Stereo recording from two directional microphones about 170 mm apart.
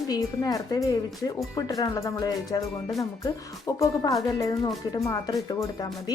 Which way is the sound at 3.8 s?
20° left (ahead or behind).